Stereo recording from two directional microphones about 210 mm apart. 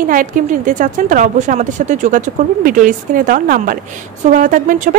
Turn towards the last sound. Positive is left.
turn(degrees=-40)  # may be behind; listen again after turning